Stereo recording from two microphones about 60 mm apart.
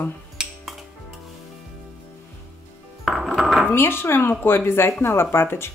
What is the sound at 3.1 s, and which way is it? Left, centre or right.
Music, centre.